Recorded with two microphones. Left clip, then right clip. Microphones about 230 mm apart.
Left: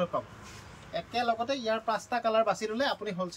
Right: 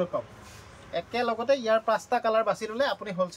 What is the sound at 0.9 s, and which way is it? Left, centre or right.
Speech, centre.